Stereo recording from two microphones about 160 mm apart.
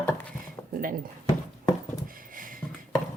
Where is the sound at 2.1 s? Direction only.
60° right (ahead or behind).